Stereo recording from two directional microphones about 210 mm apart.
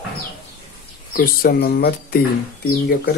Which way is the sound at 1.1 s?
45° left (ahead or behind).